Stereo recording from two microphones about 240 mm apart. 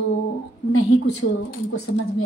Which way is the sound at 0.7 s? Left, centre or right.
Left.